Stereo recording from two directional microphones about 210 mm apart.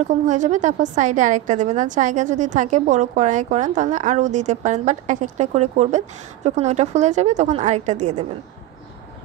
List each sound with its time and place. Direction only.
0.0 s a woman's voice: 35° right (ahead or behind)